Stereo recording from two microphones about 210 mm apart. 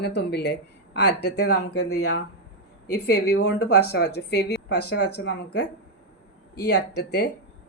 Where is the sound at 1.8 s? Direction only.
90° left.